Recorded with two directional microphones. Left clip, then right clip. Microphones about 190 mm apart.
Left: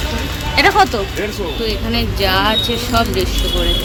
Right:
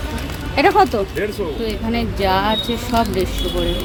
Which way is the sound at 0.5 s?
35° right (ahead or behind).